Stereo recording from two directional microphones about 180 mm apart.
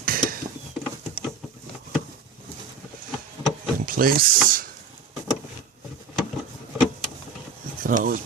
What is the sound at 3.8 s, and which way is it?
Speech, 55° right (ahead or behind).